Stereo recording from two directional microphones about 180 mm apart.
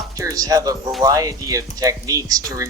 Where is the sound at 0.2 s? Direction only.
20° right (ahead or behind).